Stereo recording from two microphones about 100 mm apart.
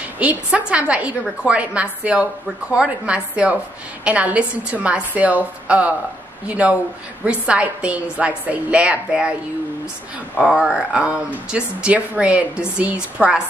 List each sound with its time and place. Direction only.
0.2 s speech: 15° right (ahead or behind)
10.4 s speech: 10° right (ahead or behind)